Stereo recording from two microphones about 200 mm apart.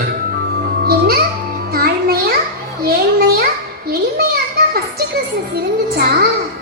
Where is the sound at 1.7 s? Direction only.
50° right (ahead or behind).